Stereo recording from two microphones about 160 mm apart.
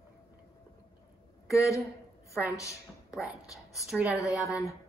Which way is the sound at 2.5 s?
20° left (ahead or behind).